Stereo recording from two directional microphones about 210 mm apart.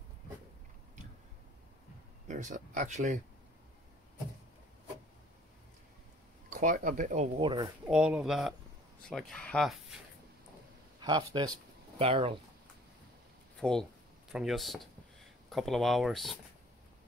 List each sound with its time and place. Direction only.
2.2 s speech: 35° right (ahead or behind)
6.5 s speech: 40° right (ahead or behind)
7.3 s speech: 20° right (ahead or behind)
7.8 s speech: 5° right (ahead or behind)
11.0 s speech: 20° right (ahead or behind)
13.6 s speech: centre (ahead or behind)